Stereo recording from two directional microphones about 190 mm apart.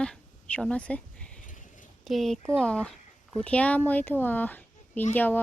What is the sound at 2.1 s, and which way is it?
A woman's voice, centre (ahead or behind).